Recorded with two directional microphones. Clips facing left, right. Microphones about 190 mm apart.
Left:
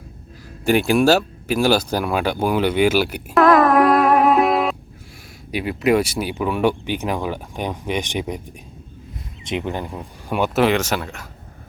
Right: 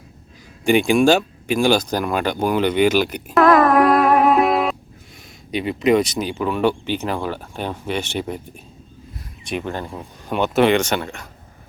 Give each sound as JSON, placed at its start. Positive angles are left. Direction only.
{"t": 0.6, "sound": "speech", "side_deg": 5}
{"t": 9.4, "sound": "speech", "side_deg": 20}